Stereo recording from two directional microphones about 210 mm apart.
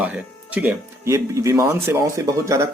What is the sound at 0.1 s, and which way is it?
Speech, 10° right (ahead or behind).